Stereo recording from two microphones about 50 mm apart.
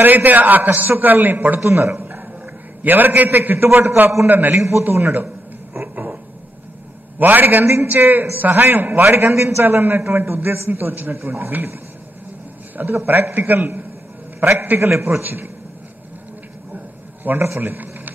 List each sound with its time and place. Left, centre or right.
0.0 s a man's voice: right
1.6 s a man's voice: right
2.0 s a sound: right
2.8 s a man's voice: right
4.8 s a man's voice: right
7.2 s a man's voice: right
9.1 s a man's voice: right
9.7 s a man's voice: right
11.1 s a man's voice: right
13.0 s a man's voice: right
14.4 s a man's voice: right
15.2 s a man's voice: right
17.3 s a man's voice: right